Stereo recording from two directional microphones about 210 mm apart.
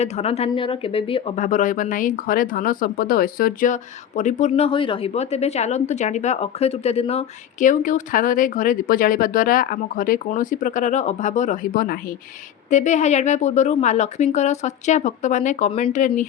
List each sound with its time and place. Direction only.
0.0 s speech: 30° left (ahead or behind)
12.7 s speech: 35° left (ahead or behind)